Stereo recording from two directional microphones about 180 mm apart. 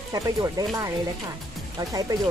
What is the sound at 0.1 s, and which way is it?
Speech, 20° right (ahead or behind).